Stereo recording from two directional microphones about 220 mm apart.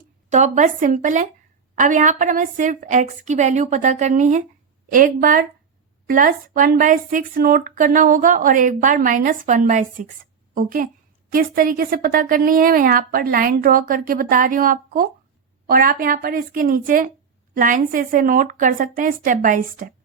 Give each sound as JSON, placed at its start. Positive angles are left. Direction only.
{"t": 0.3, "sound": "speech", "side_deg": -35}